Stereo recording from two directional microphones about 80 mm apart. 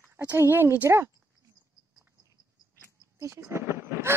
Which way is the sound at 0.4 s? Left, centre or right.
Right.